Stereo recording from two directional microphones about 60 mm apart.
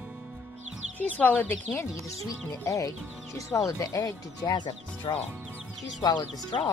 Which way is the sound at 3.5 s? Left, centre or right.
Left.